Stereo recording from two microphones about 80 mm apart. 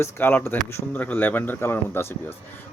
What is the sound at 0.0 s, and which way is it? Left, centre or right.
Speech, left.